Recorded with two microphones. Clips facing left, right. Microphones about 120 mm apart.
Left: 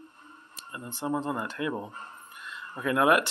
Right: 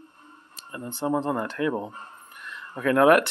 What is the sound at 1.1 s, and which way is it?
Speech, 50° right (ahead or behind).